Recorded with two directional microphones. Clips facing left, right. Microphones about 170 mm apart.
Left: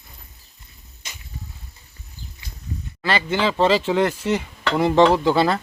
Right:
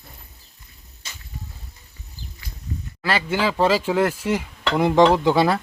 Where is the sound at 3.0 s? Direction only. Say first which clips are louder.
Left 1 dB; 5° right (ahead or behind).